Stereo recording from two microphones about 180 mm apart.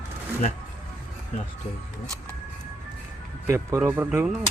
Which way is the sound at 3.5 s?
15° right (ahead or behind).